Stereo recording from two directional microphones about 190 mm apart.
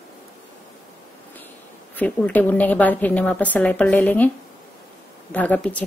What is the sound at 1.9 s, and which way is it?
A woman's voice, 10° left (ahead or behind).